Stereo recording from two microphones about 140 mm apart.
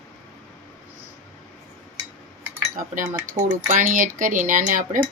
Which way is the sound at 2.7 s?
75° right (ahead or behind).